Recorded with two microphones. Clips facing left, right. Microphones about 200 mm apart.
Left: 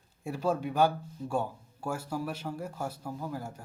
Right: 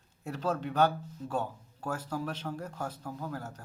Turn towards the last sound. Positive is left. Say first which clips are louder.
# left 2 dB
turn(degrees=10)  # may be behind; listen again after turning